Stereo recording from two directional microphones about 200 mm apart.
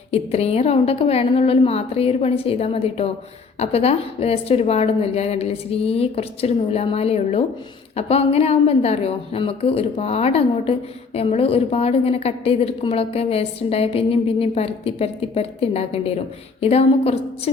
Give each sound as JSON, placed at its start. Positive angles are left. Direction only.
{"t": 0.1, "sound": "a woman's voice", "side_deg": 30}